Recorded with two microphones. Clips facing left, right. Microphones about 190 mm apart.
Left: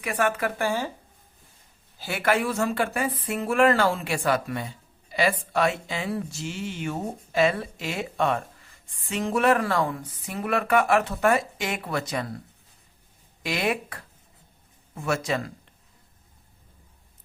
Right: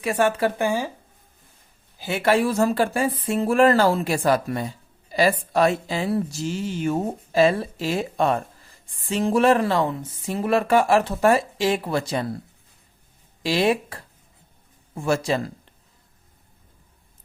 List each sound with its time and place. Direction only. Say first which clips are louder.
0.0 s speech: right 5 dB; 30° right (ahead or behind)
0.6 s speech: right 1 dB; 15° right (ahead or behind)
2.0 s speech: right 4 dB; 20° right (ahead or behind)
13.4 s speech: right 6 dB; 30° right (ahead or behind)